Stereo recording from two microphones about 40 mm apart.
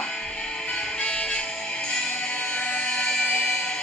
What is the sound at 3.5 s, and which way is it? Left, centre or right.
Music, left.